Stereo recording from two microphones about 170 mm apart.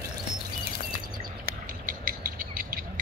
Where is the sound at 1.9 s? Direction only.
55° right (ahead or behind).